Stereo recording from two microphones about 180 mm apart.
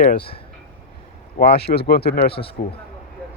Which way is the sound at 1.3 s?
60° left (ahead or behind).